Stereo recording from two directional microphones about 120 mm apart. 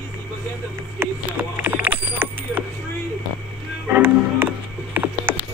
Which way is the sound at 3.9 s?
15° right (ahead or behind).